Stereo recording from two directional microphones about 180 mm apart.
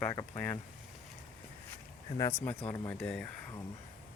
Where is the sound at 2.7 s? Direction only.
5° left (ahead or behind).